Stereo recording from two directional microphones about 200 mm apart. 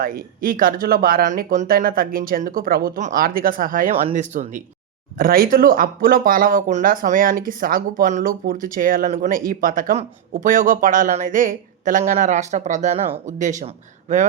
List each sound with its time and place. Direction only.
0.0 s speech: 45° right (ahead or behind)